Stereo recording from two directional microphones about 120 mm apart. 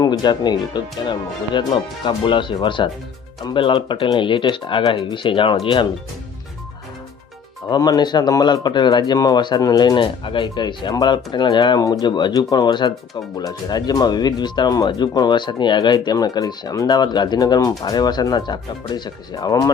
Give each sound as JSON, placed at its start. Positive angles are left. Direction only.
{"t": 0.0, "sound": "speech", "side_deg": 35}
{"t": 7.7, "sound": "speech", "side_deg": 35}